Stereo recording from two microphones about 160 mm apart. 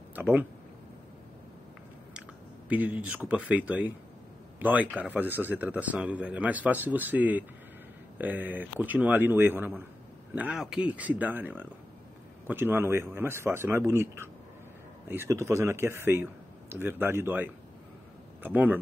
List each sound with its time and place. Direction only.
0.1 s speech: 10° right (ahead or behind)
2.7 s a man's voice: 10° right (ahead or behind)